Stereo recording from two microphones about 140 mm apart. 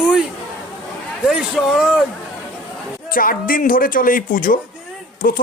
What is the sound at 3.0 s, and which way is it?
Speech, 85° left.